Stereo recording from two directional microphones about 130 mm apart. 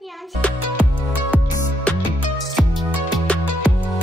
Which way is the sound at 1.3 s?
10° right (ahead or behind).